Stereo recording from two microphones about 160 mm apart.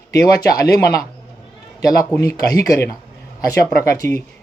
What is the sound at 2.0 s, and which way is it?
Speech, 5° left (ahead or behind).